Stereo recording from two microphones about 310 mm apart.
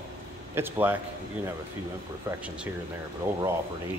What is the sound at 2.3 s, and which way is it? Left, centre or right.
A man's voice, centre.